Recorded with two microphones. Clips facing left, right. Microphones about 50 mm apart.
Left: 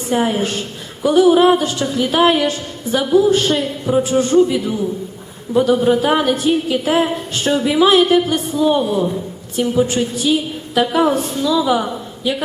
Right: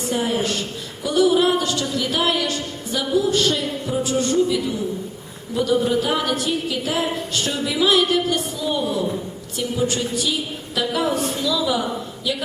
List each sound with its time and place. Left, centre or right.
0.1 s music: left
9.6 s a woman's voice: left
10.8 s music: left